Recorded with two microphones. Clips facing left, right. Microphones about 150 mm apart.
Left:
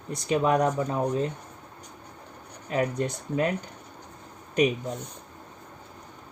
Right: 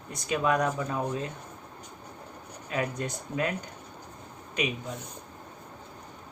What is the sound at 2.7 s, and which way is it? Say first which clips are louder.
Speech: left 5 dB; 30° left (ahead or behind).